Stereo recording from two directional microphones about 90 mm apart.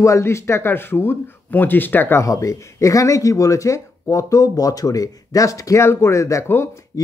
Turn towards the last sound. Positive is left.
turn(degrees=30)  # may be behind; listen again after turning